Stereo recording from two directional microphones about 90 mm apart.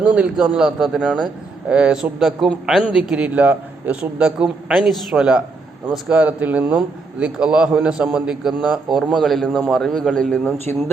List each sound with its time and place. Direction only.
0.0 s speech: 15° right (ahead or behind)
2.1 s a man's voice: centre (ahead or behind)